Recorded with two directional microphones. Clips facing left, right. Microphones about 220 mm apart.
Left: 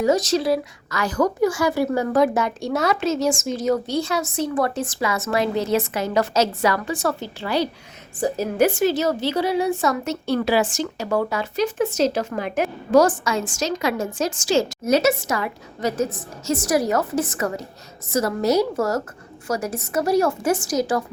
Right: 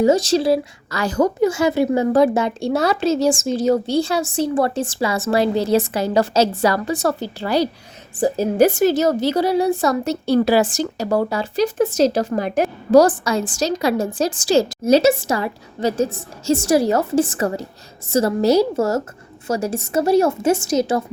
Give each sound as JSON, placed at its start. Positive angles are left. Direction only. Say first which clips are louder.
{"t": 0.0, "sound": "a woman's voice", "louder": "right 4 dB", "side_deg": -30}